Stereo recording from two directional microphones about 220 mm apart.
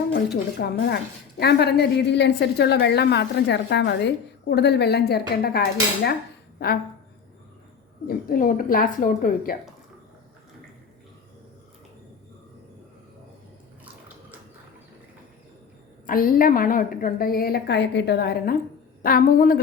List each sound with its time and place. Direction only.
0.1 s a woman's voice: 50° left (ahead or behind)
8.0 s a woman's voice: 40° left (ahead or behind)
16.0 s a woman's voice: 40° left (ahead or behind)